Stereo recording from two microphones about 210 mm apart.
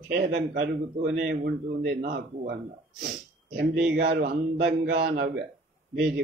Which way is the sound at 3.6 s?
50° right (ahead or behind).